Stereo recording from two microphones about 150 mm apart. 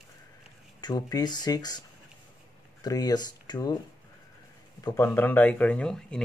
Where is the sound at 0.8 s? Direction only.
25° left (ahead or behind).